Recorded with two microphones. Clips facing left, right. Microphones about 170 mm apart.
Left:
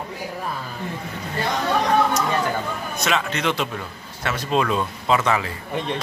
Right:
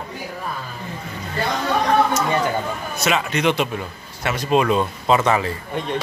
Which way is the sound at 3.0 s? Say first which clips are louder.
Right 3 dB; 10° right (ahead or behind).